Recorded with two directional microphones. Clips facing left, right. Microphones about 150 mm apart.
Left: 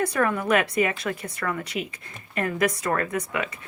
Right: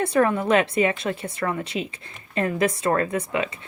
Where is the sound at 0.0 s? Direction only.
25° right (ahead or behind).